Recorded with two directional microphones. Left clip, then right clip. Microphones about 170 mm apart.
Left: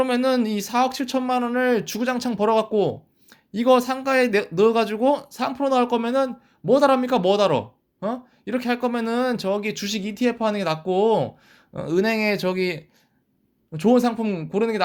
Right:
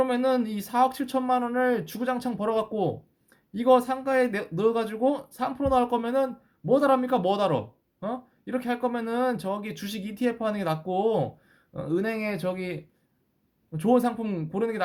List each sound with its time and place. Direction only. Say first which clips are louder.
0.0 s speech: left 3 dB; 25° left (ahead or behind)
13.7 s speech: left 4 dB; 20° left (ahead or behind)